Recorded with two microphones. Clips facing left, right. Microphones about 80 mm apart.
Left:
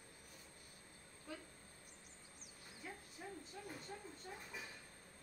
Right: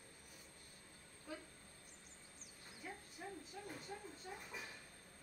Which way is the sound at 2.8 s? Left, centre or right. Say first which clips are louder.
Right 1 dB; centre.